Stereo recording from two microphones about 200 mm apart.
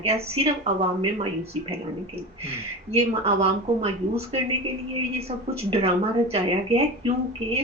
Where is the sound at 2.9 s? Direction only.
30° right (ahead or behind).